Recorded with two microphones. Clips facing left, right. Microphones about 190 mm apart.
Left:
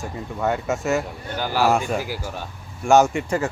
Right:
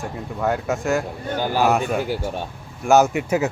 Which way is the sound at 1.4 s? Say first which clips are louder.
Right 1 dB; 15° right (ahead or behind).